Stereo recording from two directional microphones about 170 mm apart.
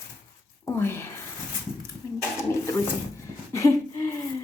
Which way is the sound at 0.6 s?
15° left (ahead or behind).